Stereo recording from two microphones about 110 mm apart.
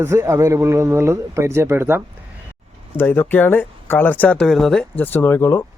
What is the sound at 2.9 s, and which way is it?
Speech, 20° left (ahead or behind).